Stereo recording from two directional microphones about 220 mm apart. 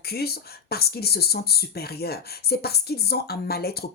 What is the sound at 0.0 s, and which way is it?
Speech, 45° left (ahead or behind).